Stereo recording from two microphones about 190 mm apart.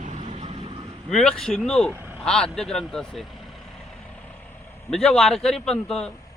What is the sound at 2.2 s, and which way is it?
Speech, 5° left (ahead or behind).